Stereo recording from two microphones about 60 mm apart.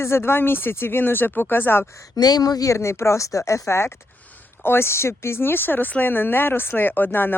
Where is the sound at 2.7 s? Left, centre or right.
Left.